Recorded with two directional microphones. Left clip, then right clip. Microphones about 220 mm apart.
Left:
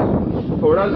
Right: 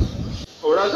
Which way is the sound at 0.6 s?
45° right (ahead or behind).